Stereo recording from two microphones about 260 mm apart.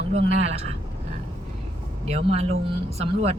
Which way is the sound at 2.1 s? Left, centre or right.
Right.